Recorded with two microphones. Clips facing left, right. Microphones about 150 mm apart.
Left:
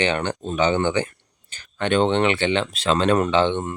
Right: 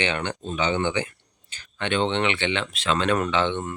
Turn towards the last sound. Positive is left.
turn(degrees=30)  # may be behind; listen again after turning